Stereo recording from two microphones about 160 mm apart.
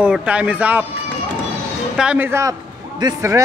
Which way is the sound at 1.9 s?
10° right (ahead or behind).